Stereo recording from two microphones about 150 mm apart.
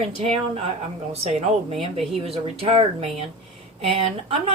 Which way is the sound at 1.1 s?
45° right (ahead or behind).